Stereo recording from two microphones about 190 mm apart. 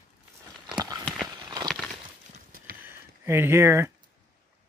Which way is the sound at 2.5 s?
50° right (ahead or behind).